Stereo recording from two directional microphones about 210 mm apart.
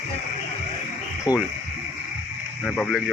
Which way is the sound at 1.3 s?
20° left (ahead or behind).